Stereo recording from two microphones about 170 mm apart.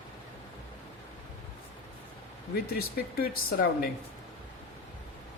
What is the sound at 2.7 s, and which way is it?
Speech, 60° left (ahead or behind).